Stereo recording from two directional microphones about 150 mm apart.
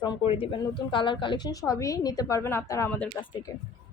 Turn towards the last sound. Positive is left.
turn(degrees=20)  # may be behind; listen again after turning